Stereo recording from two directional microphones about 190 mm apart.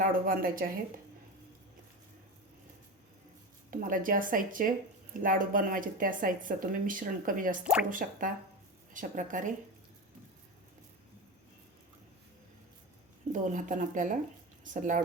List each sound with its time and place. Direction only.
0.0 s speech: 45° right (ahead or behind)
3.7 s speech: 45° right (ahead or behind)
7.6 s speech: 5° right (ahead or behind)
7.9 s speech: 45° right (ahead or behind)
13.4 s speech: 40° right (ahead or behind)